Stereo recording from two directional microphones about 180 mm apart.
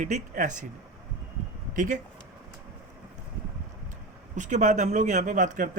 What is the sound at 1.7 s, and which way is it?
Speech, 45° right (ahead or behind).